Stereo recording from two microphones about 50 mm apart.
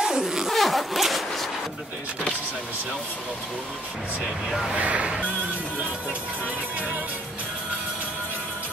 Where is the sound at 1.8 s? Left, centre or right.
Right.